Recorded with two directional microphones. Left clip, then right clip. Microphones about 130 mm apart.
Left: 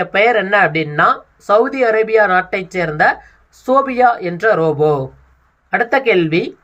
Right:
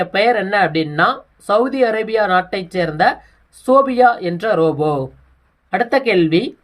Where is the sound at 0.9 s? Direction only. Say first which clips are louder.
Left 2 dB; 20° right (ahead or behind).